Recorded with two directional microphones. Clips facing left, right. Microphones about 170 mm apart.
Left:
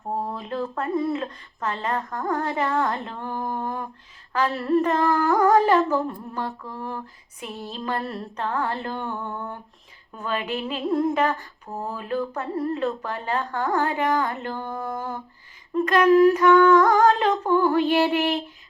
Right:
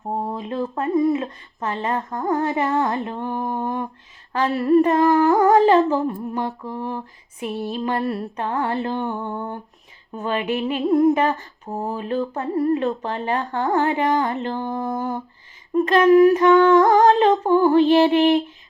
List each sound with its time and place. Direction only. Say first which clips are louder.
0.1 s female singing: right 3 dB; 20° right (ahead or behind)